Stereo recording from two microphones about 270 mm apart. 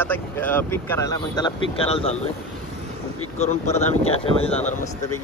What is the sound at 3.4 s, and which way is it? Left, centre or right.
Speech, left.